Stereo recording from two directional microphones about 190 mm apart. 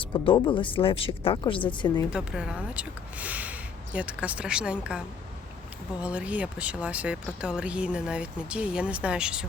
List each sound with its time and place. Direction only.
0.1 s speech: 25° left (ahead or behind)
2.0 s speech: 5° right (ahead or behind)